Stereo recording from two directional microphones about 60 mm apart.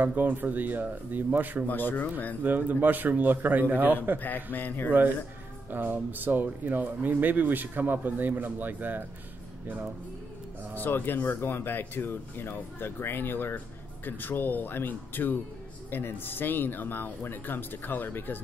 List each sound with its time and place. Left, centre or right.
0.0 s speech: right
1.7 s speech: left
2.4 s speech: right
4.2 s speech: left
5.7 s speech: right
10.8 s speech: left